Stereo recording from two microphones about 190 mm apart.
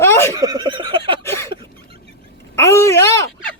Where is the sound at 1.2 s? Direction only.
15° left (ahead or behind).